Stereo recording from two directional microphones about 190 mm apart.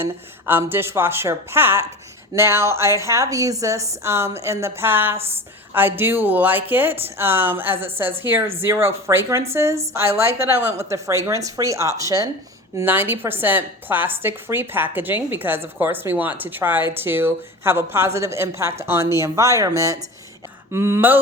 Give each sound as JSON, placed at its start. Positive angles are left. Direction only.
{"t": 0.0, "sound": "a woman's voice", "side_deg": -10}